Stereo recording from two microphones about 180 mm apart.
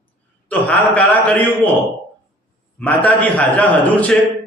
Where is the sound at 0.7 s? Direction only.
5° left (ahead or behind).